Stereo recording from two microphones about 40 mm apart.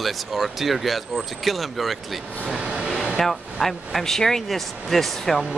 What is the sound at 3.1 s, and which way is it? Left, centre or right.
Speech, centre.